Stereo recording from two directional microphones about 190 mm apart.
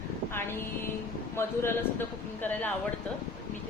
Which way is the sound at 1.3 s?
10° left (ahead or behind).